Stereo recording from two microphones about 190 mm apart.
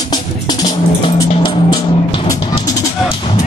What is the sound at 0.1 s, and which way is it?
Music, 20° left (ahead or behind).